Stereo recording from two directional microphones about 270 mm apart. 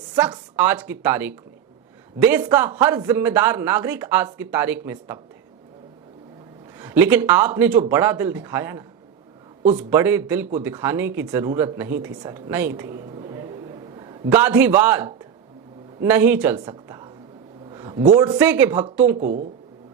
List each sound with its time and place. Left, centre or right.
0.2 s a man's voice: centre
6.7 s a man's voice: centre
9.9 s a man's voice: centre
19.1 s speech: right